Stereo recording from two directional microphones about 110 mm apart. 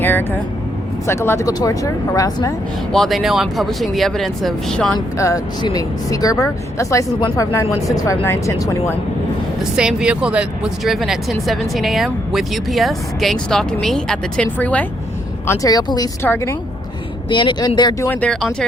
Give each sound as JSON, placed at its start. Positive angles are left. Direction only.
{"t": 0.0, "sound": "vehicle", "side_deg": 20}
{"t": 1.0, "sound": "speech", "side_deg": 25}
{"t": 2.9, "sound": "speech", "side_deg": 0}
{"t": 5.1, "sound": "speech", "side_deg": 30}
{"t": 9.7, "sound": "speech", "side_deg": -10}
{"t": 15.4, "sound": "speech", "side_deg": 35}
{"t": 16.2, "sound": "speech", "side_deg": 20}
{"t": 17.2, "sound": "speech", "side_deg": 45}
{"t": 18.1, "sound": "speech", "side_deg": 10}